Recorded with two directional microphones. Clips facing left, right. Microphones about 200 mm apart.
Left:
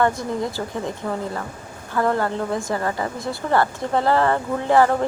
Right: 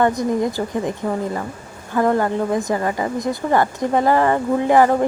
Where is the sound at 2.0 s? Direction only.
15° right (ahead or behind).